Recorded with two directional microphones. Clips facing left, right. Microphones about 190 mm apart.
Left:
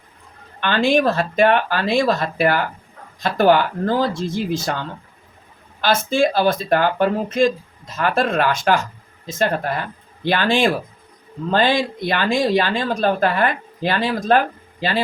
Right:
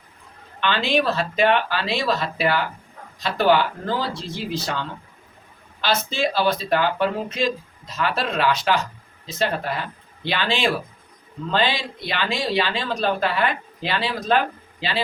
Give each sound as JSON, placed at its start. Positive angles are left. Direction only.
{"t": 0.6, "sound": "speech", "side_deg": 50}